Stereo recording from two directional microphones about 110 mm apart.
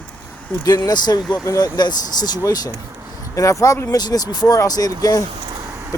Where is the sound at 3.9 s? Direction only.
35° left (ahead or behind).